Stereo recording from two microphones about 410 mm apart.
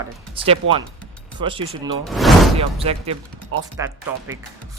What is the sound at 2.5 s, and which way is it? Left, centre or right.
Speech, centre.